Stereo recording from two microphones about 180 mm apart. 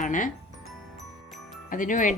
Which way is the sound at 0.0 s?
45° left (ahead or behind).